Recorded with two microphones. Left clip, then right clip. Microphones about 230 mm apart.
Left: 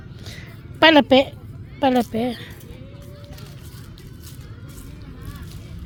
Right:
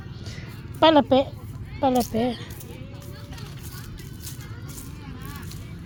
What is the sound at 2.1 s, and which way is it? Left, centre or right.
Speech, centre.